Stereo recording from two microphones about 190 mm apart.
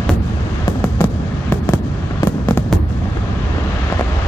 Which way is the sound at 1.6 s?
20° left (ahead or behind).